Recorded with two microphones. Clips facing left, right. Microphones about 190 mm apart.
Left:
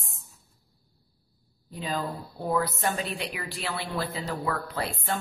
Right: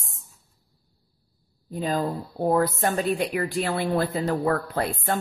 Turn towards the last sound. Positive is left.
turn(degrees=-50)  # may be behind; listen again after turning